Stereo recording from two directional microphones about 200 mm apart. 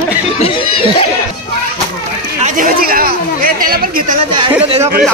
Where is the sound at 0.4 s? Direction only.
30° left (ahead or behind).